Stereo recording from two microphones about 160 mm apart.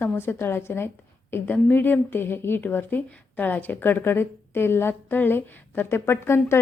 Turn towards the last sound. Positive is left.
turn(degrees=15)  # may be behind; listen again after turning